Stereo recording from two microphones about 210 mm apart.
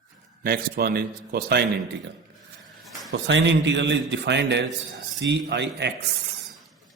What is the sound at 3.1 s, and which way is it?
A man's voice, 60° right (ahead or behind).